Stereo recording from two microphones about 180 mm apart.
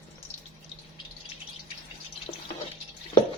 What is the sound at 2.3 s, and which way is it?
Drip, 35° left (ahead or behind).